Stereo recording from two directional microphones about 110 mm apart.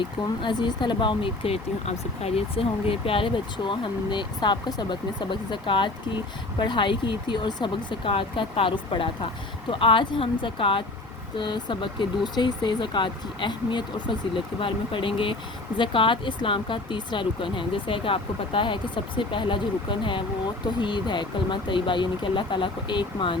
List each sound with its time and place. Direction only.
0.0 s speech: 45° left (ahead or behind)